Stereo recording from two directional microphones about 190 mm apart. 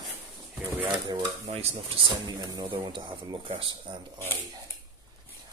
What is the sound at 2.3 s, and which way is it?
Speech, 20° right (ahead or behind).